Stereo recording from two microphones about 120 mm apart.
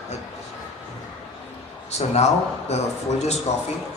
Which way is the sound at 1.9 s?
65° left (ahead or behind).